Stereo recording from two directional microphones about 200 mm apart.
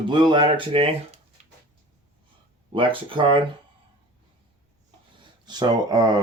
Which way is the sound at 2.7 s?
25° right (ahead or behind).